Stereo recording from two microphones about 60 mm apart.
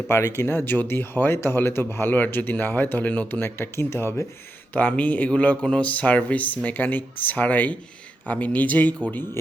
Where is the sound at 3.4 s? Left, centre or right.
Left.